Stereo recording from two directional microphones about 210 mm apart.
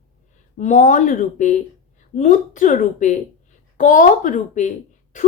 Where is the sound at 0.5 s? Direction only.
35° left (ahead or behind).